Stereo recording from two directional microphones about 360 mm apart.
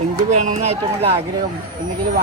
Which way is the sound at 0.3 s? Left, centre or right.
Centre.